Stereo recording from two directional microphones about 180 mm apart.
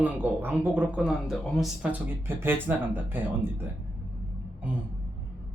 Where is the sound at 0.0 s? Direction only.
10° right (ahead or behind).